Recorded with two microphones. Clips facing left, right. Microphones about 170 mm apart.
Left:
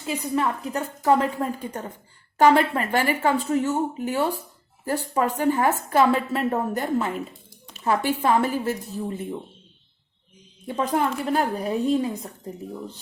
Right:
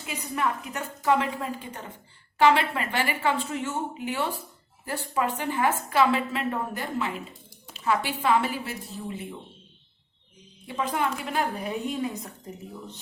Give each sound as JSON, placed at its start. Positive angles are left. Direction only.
{"t": 0.0, "sound": "a woman's voice", "side_deg": 35}
{"t": 10.7, "sound": "a woman's voice", "side_deg": 40}